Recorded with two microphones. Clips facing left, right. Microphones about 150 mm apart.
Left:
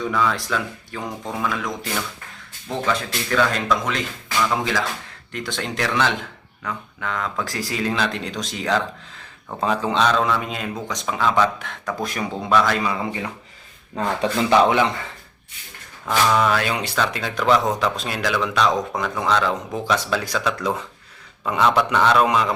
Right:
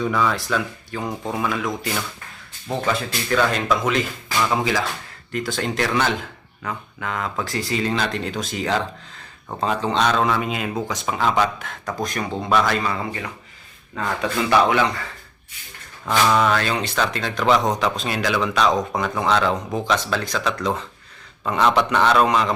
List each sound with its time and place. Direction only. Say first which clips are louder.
0.0 s speech: right 1 dB; 5° right (ahead or behind)
9.8 s speech: even; 10° left (ahead or behind)
10.3 s speech: right 2 dB; 5° right (ahead or behind)
12.5 s speech: left 1 dB; 5° right (ahead or behind)
12.8 s speech: left 1 dB; 15° left (ahead or behind)
16.0 s speech: right 1 dB; centre (ahead or behind)